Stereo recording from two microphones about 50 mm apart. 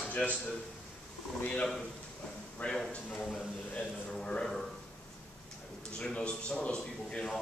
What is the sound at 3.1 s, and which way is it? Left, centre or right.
Speech, centre.